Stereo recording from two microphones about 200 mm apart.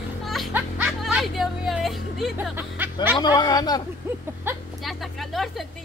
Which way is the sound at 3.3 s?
20° left (ahead or behind).